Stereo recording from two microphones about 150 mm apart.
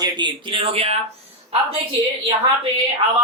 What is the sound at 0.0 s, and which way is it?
Speech, 30° right (ahead or behind).